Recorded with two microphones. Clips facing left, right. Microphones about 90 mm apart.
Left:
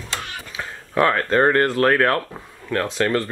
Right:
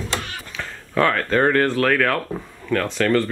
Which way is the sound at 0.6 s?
10° left (ahead or behind).